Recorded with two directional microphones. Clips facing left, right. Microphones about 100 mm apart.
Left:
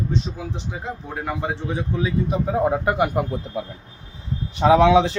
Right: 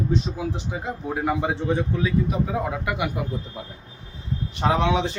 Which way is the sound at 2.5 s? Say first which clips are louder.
Left 6 dB; 35° left (ahead or behind).